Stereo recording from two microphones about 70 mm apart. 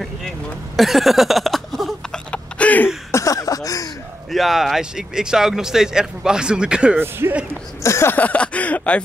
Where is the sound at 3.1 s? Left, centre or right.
Left.